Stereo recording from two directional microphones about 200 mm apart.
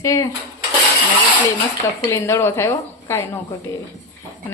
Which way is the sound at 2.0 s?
15° left (ahead or behind).